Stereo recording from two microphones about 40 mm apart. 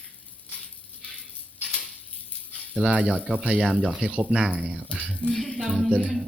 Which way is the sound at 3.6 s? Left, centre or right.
Centre.